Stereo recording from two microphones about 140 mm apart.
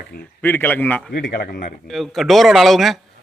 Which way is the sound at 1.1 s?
90° left.